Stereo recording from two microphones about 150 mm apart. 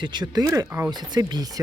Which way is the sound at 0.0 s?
30° right (ahead or behind).